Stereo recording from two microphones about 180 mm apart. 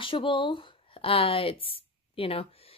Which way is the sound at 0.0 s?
30° left (ahead or behind).